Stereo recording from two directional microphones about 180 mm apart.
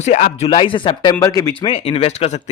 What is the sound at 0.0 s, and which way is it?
Speech, 45° left (ahead or behind).